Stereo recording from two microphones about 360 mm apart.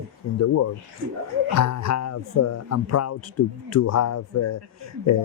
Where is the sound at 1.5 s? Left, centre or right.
Left.